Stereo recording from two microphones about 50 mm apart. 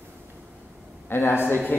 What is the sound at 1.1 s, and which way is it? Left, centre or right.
Speech, left.